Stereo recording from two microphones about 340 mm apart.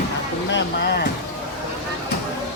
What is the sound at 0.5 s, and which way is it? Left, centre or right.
Speech, left.